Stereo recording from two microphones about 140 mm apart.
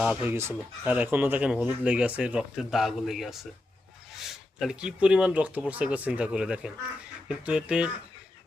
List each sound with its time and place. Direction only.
0.0 s speech: 10° right (ahead or behind)